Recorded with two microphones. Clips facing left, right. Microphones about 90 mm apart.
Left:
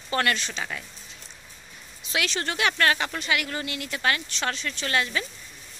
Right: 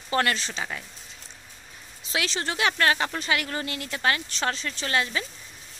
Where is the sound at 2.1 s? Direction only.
25° right (ahead or behind).